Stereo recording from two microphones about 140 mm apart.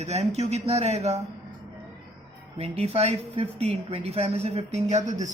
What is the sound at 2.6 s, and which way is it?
A woman's voice, 45° right (ahead or behind).